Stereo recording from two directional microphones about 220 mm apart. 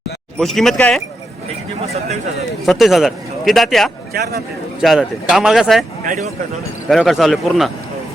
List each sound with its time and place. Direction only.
0.3 s speech: centre (ahead or behind)
2.6 s speech: centre (ahead or behind)
4.1 s speech: 45° right (ahead or behind)
4.8 s speech: centre (ahead or behind)
6.8 s speech: centre (ahead or behind)